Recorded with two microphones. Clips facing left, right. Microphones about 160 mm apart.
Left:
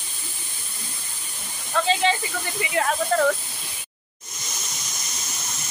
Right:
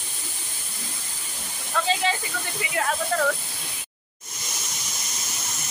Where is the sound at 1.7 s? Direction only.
5° right (ahead or behind).